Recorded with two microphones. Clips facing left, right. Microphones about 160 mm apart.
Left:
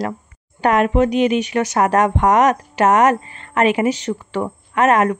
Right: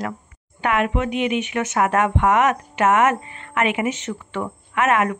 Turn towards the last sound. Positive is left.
turn(degrees=40)  # may be behind; listen again after turning